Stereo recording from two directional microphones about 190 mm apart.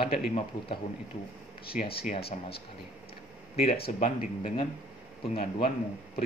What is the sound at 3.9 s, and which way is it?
Speech, 40° left (ahead or behind).